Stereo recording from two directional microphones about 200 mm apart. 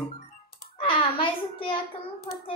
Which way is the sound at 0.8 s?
25° left (ahead or behind).